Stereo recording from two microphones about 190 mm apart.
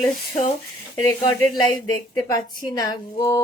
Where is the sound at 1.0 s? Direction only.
15° left (ahead or behind).